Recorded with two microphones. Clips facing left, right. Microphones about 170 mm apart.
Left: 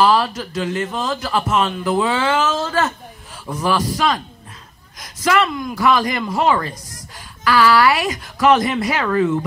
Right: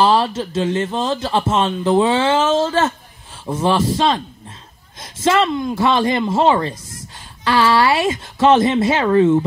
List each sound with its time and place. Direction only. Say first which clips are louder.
0.0 s speech: right 1 dB; 25° right (ahead or behind)